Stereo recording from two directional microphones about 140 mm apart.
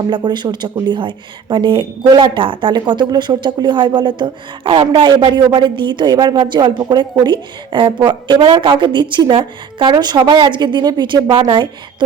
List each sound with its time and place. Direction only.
0.1 s speech: 30° right (ahead or behind)